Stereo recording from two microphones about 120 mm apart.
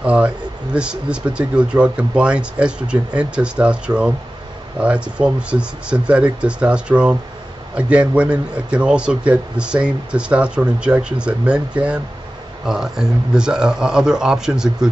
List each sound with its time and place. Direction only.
0.0 s a man's voice: 10° right (ahead or behind)